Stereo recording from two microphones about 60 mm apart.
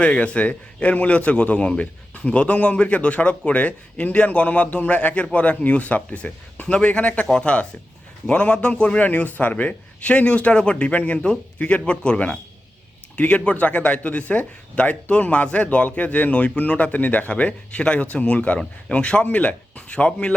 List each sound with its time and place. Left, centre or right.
0.0 s a man's voice: centre